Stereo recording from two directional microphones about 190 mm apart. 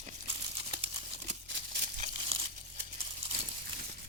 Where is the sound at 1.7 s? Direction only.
40° right (ahead or behind).